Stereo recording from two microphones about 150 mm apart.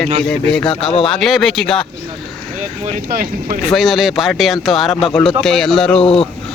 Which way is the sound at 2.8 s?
60° right (ahead or behind).